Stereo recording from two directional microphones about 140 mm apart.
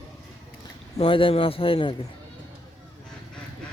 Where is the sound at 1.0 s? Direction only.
40° left (ahead or behind).